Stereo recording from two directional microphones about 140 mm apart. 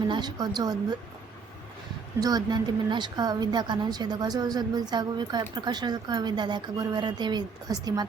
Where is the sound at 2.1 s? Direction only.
25° right (ahead or behind).